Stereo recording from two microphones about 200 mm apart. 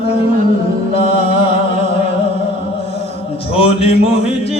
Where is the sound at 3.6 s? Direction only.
30° left (ahead or behind).